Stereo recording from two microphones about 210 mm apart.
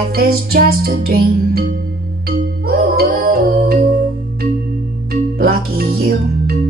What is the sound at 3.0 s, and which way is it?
Music, 45° right (ahead or behind).